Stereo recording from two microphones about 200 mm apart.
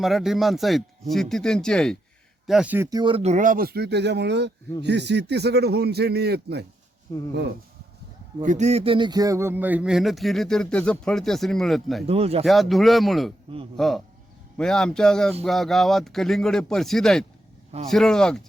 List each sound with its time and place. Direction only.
0.0 s a man's voice: centre (ahead or behind); by 6.7 s 55° right (ahead or behind)
8.4 s speech: 35° right (ahead or behind); by 12.0 s centre (ahead or behind)
12.0 s speech: 30° right (ahead or behind)
12.5 s speech: centre (ahead or behind)